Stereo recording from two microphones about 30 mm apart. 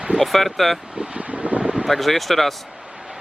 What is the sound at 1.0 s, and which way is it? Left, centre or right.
Wind, right.